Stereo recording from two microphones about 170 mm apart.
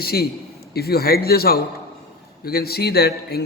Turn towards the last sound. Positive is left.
turn(degrees=70)  # may be behind; listen again after turning